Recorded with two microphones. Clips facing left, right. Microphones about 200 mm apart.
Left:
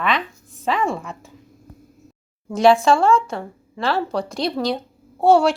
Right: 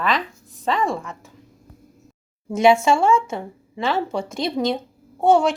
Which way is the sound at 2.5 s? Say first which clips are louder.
Left 1 dB; 25° right (ahead or behind).